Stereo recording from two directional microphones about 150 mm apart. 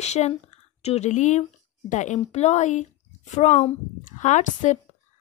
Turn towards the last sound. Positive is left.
turn(degrees=55)  # may be behind; listen again after turning